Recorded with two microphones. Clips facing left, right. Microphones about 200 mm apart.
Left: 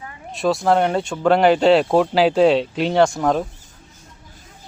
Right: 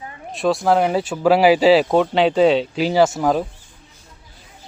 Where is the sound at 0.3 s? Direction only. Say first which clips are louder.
Even; centre (ahead or behind).